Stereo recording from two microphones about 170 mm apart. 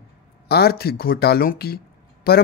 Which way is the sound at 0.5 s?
70° left (ahead or behind).